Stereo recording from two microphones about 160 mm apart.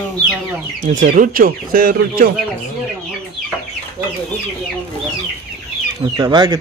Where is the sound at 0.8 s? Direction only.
55° right (ahead or behind).